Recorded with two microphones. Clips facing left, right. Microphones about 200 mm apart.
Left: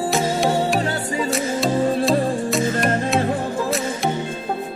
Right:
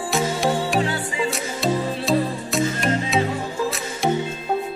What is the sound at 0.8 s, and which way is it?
Music, 40° left (ahead or behind).